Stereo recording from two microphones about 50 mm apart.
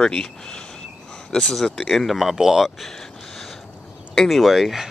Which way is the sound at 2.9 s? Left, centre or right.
Centre.